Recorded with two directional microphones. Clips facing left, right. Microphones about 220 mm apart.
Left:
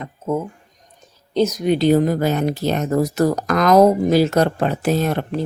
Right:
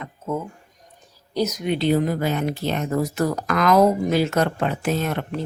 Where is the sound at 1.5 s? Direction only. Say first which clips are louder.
Left 5 dB; 40° left (ahead or behind).